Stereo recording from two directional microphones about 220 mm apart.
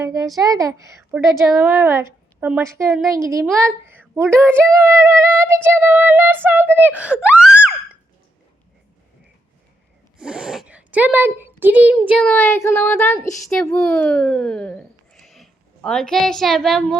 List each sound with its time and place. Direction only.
0.0 s a child's voice: 15° right (ahead or behind)
10.2 s speech: 5° right (ahead or behind)
12.2 s speech: 10° left (ahead or behind)